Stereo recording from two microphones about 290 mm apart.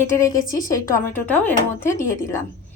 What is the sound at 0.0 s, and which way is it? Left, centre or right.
A woman's voice, centre.